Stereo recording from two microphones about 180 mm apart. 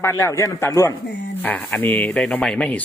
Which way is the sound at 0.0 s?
15° left (ahead or behind).